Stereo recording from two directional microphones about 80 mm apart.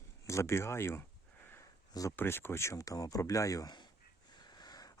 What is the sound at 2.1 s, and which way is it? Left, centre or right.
Speech, left.